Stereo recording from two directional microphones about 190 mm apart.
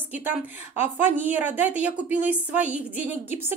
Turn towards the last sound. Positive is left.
turn(degrees=-10)  # may be behind; listen again after turning